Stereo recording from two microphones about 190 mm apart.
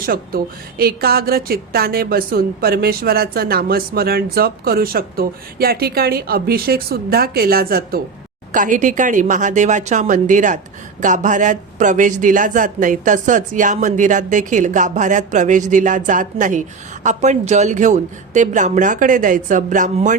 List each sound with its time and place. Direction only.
0.0 s speech: 50° right (ahead or behind)